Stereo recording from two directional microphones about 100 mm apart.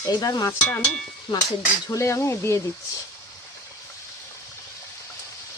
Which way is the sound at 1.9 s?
30° left (ahead or behind).